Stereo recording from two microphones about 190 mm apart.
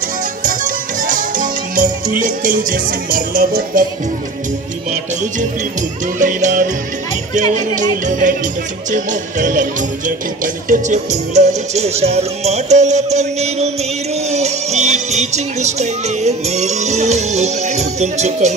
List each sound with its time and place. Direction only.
0.4 s music: 45° right (ahead or behind)
5.8 s music: 40° right (ahead or behind)